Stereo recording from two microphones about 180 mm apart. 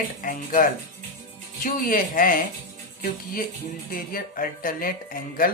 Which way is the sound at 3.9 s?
50° left (ahead or behind).